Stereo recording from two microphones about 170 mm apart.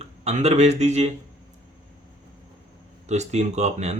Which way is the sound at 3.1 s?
40° right (ahead or behind).